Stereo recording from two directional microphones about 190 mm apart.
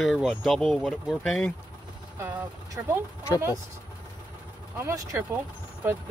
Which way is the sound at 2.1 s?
15° right (ahead or behind).